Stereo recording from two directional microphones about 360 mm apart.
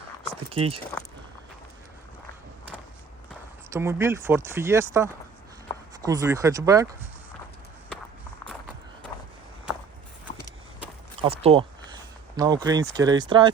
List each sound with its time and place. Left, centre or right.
0.5 s speech: centre
3.7 s speech: centre
11.2 s speech: centre